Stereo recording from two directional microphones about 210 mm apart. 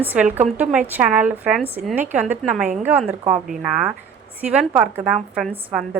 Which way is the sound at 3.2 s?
35° right (ahead or behind).